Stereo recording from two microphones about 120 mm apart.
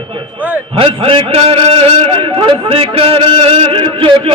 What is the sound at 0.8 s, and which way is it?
A man's voice, 50° right (ahead or behind).